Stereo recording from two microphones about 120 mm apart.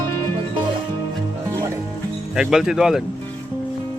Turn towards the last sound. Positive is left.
turn(degrees=-5)  # may be behind; listen again after turning